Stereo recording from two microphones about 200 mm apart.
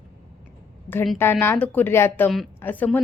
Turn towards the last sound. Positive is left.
turn(degrees=10)  # may be behind; listen again after turning